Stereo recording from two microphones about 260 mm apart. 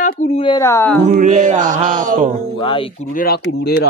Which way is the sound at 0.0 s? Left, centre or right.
Left.